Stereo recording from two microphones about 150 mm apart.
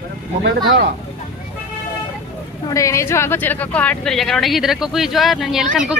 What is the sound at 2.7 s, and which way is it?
A woman's voice, 20° left (ahead or behind).